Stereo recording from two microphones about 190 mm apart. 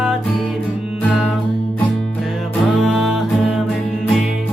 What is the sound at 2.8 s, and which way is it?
Music, centre (ahead or behind).